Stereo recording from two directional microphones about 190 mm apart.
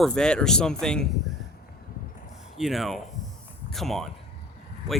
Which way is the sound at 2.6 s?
Centre (ahead or behind).